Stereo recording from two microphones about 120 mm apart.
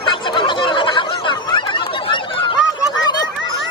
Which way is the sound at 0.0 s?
40° left (ahead or behind).